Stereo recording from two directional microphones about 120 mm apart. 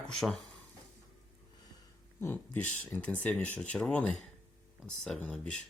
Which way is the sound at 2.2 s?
15° left (ahead or behind).